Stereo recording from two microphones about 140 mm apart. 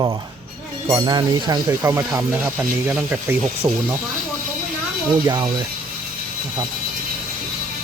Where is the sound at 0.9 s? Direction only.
25° right (ahead or behind).